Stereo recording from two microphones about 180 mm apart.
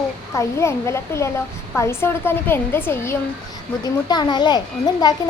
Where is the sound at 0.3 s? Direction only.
15° left (ahead or behind).